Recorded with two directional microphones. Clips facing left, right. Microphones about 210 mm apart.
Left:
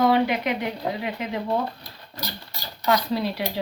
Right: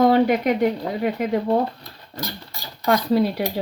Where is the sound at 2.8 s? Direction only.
50° right (ahead or behind).